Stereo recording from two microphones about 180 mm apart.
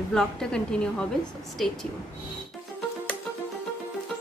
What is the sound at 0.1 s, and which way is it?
A woman's voice, 5° left (ahead or behind).